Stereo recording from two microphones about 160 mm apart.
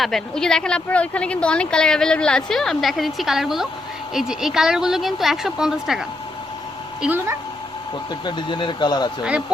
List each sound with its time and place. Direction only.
0.0 s a woman's voice: 5° left (ahead or behind)
8.2 s speech: 30° left (ahead or behind)